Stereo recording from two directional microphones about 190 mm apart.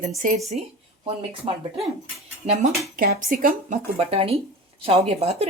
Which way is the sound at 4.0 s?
30° right (ahead or behind).